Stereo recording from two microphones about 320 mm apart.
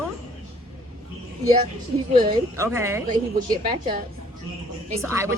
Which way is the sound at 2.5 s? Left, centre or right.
Centre.